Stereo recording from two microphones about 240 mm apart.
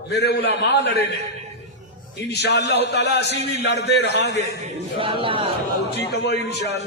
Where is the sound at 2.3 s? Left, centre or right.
Left.